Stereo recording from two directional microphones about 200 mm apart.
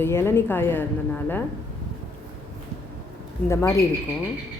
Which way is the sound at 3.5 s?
15° left (ahead or behind).